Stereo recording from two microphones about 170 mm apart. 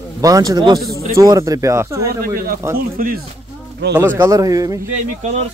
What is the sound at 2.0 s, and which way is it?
Speech, 60° right (ahead or behind).